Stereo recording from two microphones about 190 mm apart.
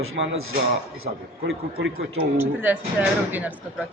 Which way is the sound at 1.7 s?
75° right (ahead or behind).